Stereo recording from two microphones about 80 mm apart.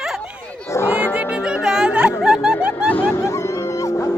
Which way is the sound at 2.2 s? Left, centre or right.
Centre.